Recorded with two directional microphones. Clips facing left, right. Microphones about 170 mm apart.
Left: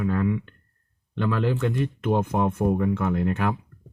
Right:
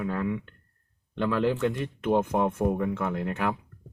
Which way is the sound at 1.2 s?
10° right (ahead or behind).